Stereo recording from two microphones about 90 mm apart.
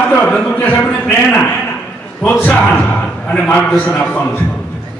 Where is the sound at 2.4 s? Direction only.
15° left (ahead or behind).